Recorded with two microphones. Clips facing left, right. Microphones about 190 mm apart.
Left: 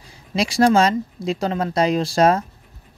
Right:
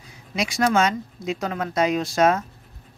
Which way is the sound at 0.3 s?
30° left (ahead or behind).